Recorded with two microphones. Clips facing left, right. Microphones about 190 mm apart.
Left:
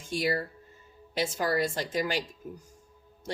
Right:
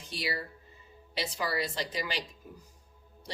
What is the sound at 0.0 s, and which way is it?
Speech, 45° left (ahead or behind).